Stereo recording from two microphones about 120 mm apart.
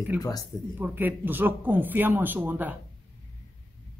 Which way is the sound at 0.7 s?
15° right (ahead or behind).